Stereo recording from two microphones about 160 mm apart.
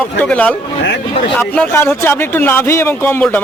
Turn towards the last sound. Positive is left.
turn(degrees=15)  # may be behind; listen again after turning